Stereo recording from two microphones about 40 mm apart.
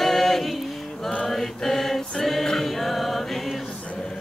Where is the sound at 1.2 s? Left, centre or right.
Centre.